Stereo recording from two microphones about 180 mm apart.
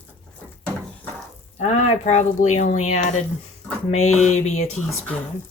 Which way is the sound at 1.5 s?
40° left (ahead or behind).